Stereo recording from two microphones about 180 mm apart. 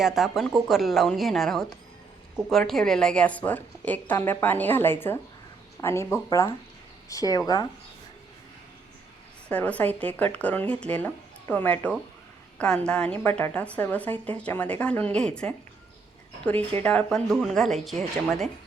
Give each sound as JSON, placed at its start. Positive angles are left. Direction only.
{"t": 0.0, "sound": "a woman's voice", "side_deg": 0}
{"t": 9.5, "sound": "a woman's voice", "side_deg": 10}